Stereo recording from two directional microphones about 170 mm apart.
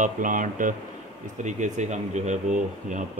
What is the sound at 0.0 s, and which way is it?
Speech, 50° right (ahead or behind).